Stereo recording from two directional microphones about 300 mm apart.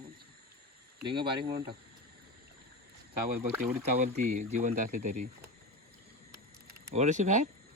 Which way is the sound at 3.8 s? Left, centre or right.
Right.